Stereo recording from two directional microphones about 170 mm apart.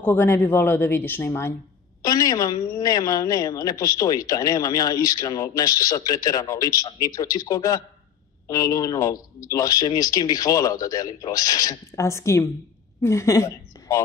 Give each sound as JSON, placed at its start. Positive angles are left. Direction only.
{"t": 0.0, "sound": "a woman's voice", "side_deg": 15}